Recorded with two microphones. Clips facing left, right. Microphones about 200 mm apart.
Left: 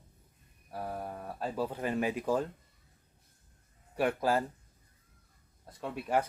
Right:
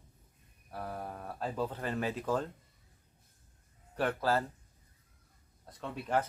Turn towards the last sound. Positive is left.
turn(degrees=10)  # may be behind; listen again after turning